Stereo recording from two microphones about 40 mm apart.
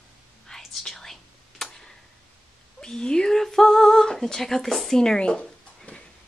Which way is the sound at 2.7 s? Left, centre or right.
Centre.